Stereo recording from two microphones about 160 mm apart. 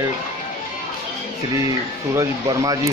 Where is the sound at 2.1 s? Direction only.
20° right (ahead or behind).